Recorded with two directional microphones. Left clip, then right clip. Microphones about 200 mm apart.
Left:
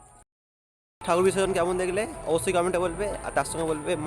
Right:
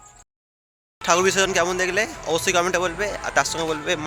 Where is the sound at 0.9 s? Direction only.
5° left (ahead or behind).